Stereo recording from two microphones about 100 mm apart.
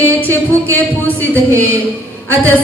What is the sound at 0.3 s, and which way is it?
Speech, 15° left (ahead or behind).